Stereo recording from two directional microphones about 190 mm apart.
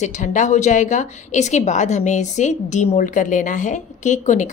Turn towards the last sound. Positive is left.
turn(degrees=40)  # may be behind; listen again after turning